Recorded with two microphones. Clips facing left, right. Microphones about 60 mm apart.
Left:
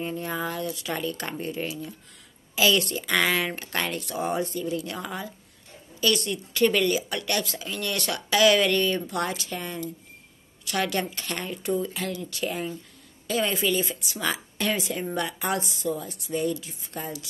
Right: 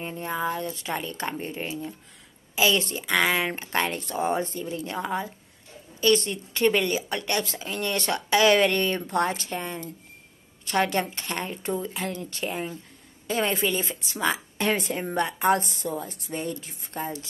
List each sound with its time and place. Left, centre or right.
0.0 s speech: right
0.7 s speech: right
0.9 s speech: right
12.1 s speech: right
12.4 s speech: right
13.3 s speech: right
14.2 s a sound: right
14.7 s speech: right
15.6 s speech: right